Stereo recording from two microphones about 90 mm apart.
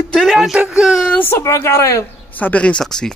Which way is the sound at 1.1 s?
30° left (ahead or behind).